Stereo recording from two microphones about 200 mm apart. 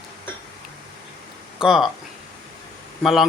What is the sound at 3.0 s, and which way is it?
Speech, centre (ahead or behind).